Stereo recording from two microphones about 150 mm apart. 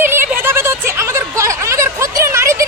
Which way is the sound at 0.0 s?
15° right (ahead or behind).